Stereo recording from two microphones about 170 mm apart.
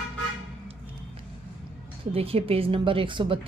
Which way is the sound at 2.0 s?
35° right (ahead or behind).